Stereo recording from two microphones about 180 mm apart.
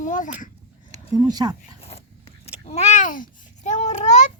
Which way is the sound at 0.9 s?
20° right (ahead or behind).